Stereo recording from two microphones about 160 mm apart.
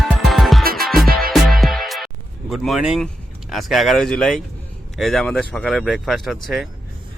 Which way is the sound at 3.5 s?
Centre (ahead or behind).